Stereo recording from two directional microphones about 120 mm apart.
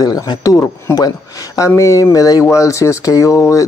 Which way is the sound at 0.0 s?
30° left (ahead or behind).